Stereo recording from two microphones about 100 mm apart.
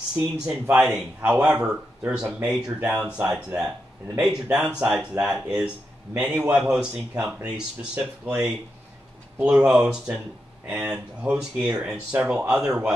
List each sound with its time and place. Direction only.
0.2 s speech: 5° right (ahead or behind)